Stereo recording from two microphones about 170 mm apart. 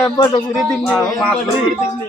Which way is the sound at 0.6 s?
Centre (ahead or behind).